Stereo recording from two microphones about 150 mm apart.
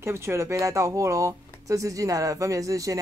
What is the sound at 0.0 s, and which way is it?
Speech, 15° right (ahead or behind).